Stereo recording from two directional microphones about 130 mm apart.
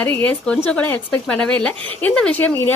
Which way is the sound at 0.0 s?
15° left (ahead or behind).